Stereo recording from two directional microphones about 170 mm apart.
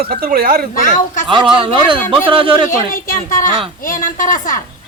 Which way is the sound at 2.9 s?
50° left (ahead or behind).